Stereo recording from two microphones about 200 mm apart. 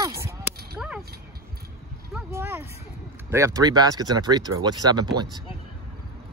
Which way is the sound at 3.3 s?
15° right (ahead or behind).